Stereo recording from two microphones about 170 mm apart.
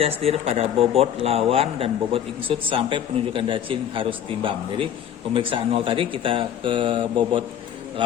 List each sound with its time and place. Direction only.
0.2 s speech: 35° right (ahead or behind)
5.3 s speech: 30° right (ahead or behind)